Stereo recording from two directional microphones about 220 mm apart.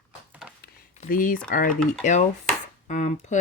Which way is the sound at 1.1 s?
40° left (ahead or behind).